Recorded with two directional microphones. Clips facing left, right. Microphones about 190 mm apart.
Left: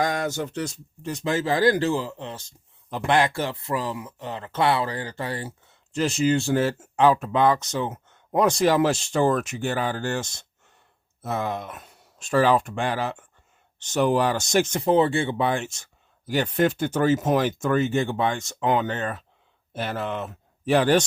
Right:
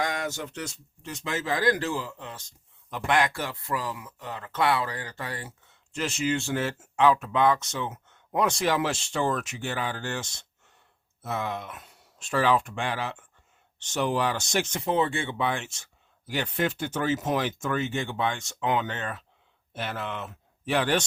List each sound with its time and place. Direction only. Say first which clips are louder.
0.0 s speech: left 5 dB; 35° left (ahead or behind)